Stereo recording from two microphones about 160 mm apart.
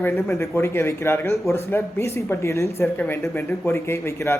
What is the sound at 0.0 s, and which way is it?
Speech, 15° left (ahead or behind).